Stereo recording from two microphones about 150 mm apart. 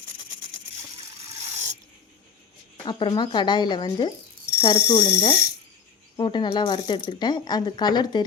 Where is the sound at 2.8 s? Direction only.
30° left (ahead or behind).